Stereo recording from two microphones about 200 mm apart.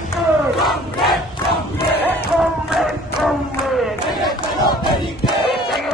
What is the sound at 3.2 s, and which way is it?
Battle cry, centre (ahead or behind).